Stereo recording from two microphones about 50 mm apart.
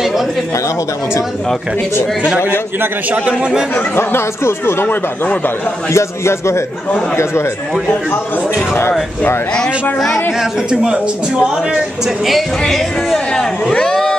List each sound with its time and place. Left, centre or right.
0.0 s a sound: centre
3.1 s a man's voice: right
3.7 s speech: left
4.8 s speech: left
5.9 s speech: left
9.9 s speech: centre
10.7 s a man's voice: centre
12.3 s speech: centre
13.3 s speech: centre